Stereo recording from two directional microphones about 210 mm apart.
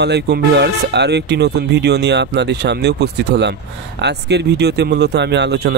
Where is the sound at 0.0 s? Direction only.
50° right (ahead or behind).